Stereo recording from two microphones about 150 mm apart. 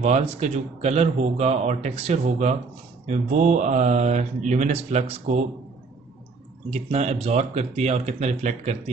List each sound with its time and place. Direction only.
0.0 s speech: 50° right (ahead or behind)
6.7 s speech: 45° right (ahead or behind)